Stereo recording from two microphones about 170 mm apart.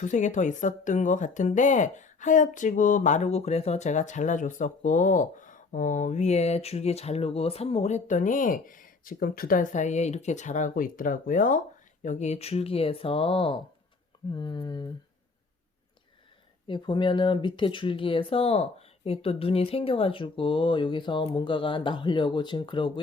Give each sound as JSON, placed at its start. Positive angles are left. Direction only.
{"t": 0.0, "sound": "speech", "side_deg": 45}
{"t": 16.6, "sound": "speech", "side_deg": 30}